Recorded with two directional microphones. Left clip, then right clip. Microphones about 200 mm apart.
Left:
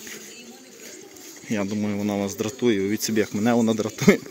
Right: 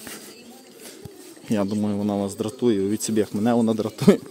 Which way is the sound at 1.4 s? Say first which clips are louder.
Right 2 dB; 25° right (ahead or behind).